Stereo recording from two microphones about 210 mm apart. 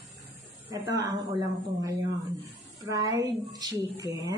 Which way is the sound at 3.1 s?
15° right (ahead or behind).